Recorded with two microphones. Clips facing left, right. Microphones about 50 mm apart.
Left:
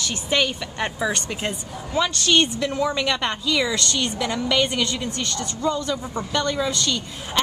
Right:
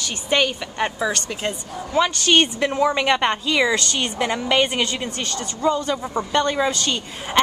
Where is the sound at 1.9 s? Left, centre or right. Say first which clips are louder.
Right 2 dB; right.